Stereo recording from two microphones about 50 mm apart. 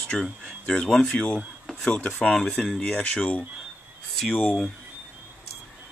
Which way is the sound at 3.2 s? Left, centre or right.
Left.